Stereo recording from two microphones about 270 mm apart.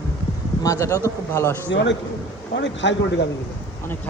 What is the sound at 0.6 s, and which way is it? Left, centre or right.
A man's voice, centre.